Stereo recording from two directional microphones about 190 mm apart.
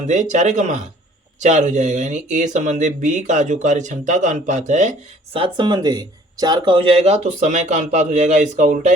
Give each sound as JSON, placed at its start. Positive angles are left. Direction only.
{"t": 0.1, "sound": "speech", "side_deg": -40}
{"t": 5.4, "sound": "speech", "side_deg": -25}